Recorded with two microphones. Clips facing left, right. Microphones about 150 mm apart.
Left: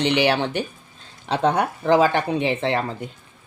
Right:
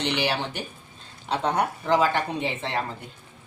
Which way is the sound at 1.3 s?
80° left.